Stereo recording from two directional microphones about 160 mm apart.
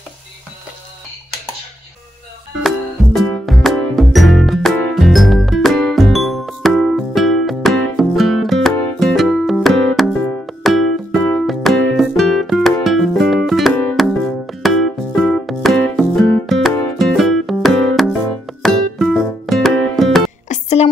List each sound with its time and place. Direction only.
2.6 s music: 5° left (ahead or behind)
20.4 s music: 45° left (ahead or behind)